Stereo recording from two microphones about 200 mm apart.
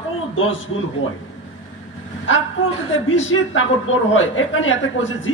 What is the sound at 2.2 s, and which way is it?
A man's voice, 75° left (ahead or behind).